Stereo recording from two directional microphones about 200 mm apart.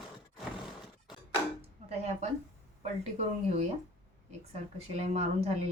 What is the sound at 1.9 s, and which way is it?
A woman's voice, 30° right (ahead or behind).